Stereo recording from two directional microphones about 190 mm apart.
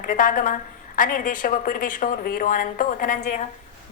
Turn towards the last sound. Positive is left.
turn(degrees=40)  # may be behind; listen again after turning